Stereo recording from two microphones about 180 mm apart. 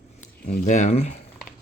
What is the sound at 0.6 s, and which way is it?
Speech, 40° left (ahead or behind).